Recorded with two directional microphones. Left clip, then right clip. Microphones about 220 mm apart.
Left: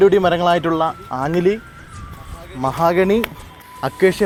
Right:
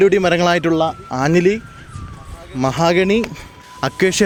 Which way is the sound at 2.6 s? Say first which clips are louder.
Right 1 dB; 40° right (ahead or behind).